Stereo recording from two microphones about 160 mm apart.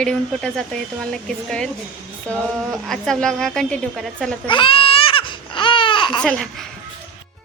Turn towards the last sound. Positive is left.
turn(degrees=5)  # may be behind; listen again after turning